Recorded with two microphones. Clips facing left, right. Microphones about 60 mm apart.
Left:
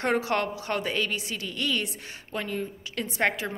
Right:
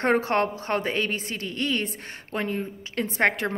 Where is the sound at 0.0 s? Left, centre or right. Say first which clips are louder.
Right 4 dB; right.